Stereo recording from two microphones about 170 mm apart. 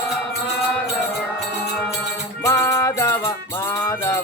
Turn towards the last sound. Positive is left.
turn(degrees=15)  # may be behind; listen again after turning